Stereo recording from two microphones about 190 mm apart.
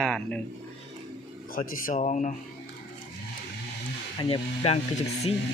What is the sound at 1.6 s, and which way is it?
Speech, 45° left (ahead or behind).